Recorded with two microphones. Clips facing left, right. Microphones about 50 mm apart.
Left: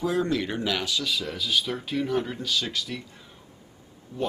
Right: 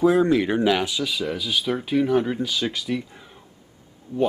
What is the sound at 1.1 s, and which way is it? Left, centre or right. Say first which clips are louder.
Speech: right 2 dB; centre.